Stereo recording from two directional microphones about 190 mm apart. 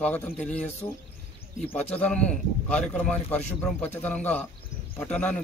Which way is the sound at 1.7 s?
10° left (ahead or behind).